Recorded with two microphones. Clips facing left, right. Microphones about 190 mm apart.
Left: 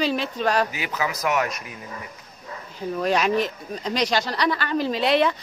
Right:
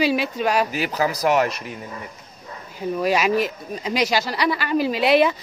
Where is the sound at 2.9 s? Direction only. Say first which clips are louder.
Right 2 dB; 5° right (ahead or behind).